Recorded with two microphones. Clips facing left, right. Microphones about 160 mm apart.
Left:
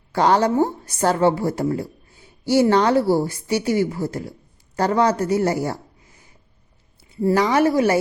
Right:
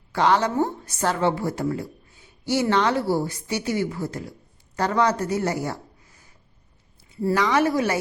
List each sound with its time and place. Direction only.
0.1 s a woman's voice: 40° left (ahead or behind)
7.1 s a woman's voice: 25° left (ahead or behind)